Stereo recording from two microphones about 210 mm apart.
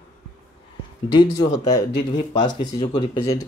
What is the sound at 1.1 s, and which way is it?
Speech, 20° left (ahead or behind).